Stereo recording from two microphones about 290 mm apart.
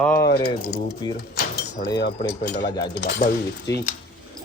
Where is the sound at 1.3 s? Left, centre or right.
Left.